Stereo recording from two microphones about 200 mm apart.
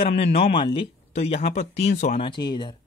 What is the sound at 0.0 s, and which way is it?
Speech, 30° left (ahead or behind).